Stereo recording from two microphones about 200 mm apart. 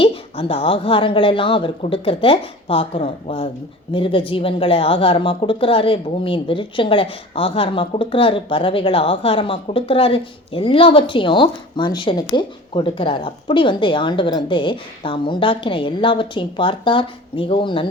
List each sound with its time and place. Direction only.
0.0 s a woman's voice: 25° left (ahead or behind)